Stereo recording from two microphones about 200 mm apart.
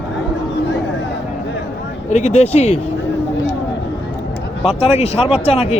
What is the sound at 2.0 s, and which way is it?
Speech, 35° left (ahead or behind).